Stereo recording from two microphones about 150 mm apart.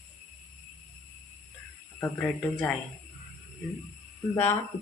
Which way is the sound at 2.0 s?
10° left (ahead or behind).